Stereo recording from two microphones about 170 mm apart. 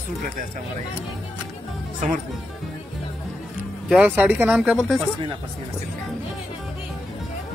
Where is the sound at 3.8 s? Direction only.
5° right (ahead or behind).